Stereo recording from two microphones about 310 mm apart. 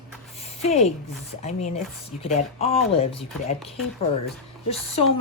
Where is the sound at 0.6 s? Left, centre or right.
Centre.